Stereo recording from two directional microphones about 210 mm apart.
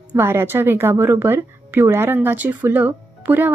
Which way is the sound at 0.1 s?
10° right (ahead or behind).